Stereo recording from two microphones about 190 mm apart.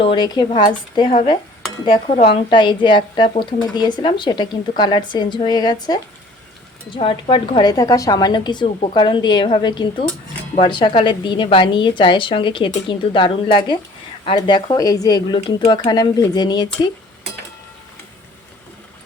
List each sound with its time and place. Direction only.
0.0 s a woman's voice: 25° left (ahead or behind)
1.8 s a woman's voice: 25° left (ahead or behind)